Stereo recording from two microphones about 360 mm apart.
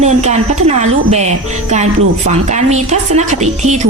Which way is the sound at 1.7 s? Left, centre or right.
Centre.